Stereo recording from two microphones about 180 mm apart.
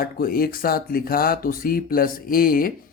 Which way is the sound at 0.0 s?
55° left (ahead or behind).